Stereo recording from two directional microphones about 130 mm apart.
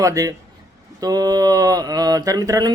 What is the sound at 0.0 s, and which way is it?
Speech, 25° right (ahead or behind).